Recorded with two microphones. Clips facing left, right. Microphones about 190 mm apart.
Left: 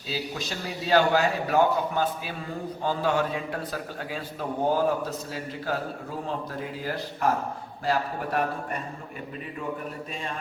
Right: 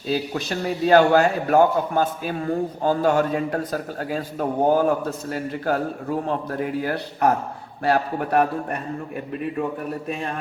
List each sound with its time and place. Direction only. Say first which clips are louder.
0.1 s a man's voice: right 8 dB; 55° right (ahead or behind)